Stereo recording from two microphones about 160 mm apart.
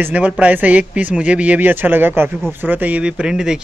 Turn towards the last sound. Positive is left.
turn(degrees=-5)  # may be behind; listen again after turning